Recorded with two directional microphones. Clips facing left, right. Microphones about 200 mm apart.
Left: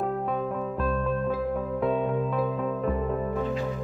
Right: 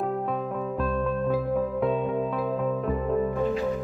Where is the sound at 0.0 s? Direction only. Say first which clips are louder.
Even; centre (ahead or behind).